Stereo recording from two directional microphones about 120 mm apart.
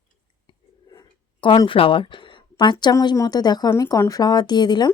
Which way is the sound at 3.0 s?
30° left (ahead or behind).